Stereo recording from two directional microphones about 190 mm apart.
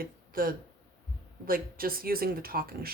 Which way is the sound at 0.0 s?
50° right (ahead or behind).